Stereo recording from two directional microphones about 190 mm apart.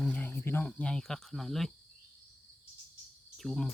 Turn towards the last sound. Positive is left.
turn(degrees=0)  # may be behind; listen again after turning